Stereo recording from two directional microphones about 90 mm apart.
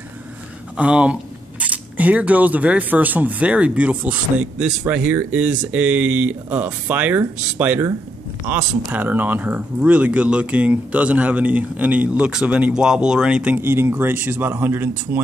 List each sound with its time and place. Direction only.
0.7 s speech: 15° right (ahead or behind)
13.6 s a man's voice: 25° right (ahead or behind)